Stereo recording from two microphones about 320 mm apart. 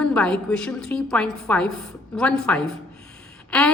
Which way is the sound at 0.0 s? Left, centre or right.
Centre.